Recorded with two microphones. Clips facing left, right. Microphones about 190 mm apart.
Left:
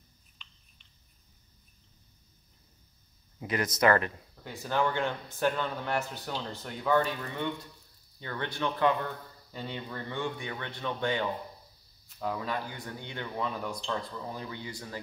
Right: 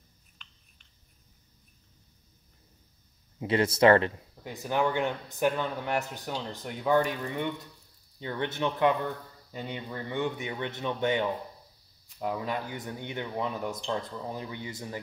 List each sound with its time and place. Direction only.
3.3 s speech: 30° right (ahead or behind)
4.4 s a man's voice: 15° right (ahead or behind)